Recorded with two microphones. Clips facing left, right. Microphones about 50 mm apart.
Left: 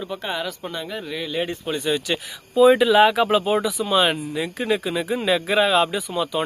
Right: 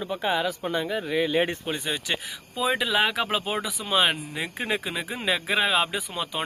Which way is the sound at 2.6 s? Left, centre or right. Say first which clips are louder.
Left 10 dB; centre.